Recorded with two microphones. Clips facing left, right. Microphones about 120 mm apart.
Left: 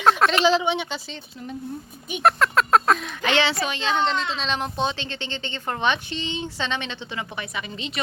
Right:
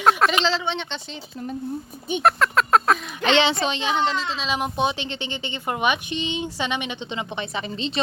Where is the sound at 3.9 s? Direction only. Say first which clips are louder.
Even; 5° right (ahead or behind).